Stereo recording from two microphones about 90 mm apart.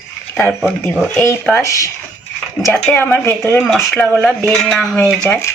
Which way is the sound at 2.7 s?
20° left (ahead or behind).